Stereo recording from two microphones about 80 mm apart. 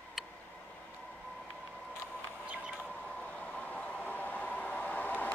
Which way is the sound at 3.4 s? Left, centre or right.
Centre.